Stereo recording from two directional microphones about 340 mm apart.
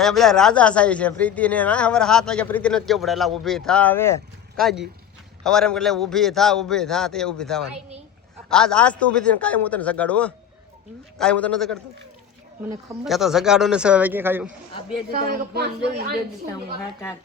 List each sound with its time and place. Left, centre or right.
0.0 s speech: centre
13.1 s speech: centre
15.1 s speech: right